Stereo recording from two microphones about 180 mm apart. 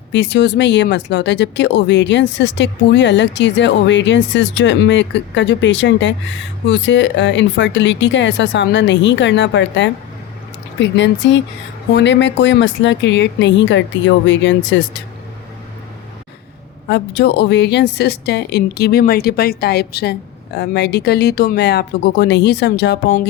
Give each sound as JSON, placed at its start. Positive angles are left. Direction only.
{"t": 0.1, "sound": "speech", "side_deg": 85}
{"t": 16.9, "sound": "a woman's voice", "side_deg": 70}